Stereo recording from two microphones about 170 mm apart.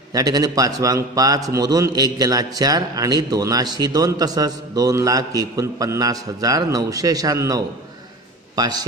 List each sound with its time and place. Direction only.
0.1 s a man's voice: 20° right (ahead or behind)